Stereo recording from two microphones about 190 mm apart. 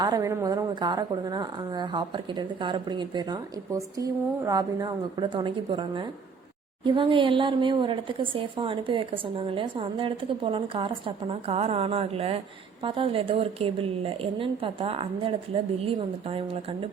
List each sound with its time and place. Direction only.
0.0 s a woman's voice: 20° right (ahead or behind)